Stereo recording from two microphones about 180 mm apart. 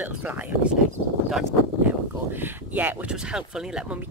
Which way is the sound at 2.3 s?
10° right (ahead or behind).